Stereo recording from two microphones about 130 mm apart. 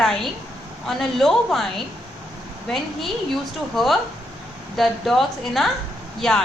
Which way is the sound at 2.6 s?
Centre (ahead or behind).